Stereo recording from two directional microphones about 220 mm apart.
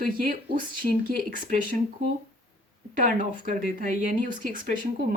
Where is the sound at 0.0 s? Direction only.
40° right (ahead or behind).